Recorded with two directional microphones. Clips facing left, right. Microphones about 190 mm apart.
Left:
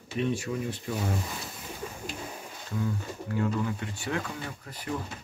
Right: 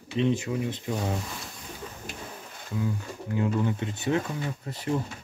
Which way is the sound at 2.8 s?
20° right (ahead or behind).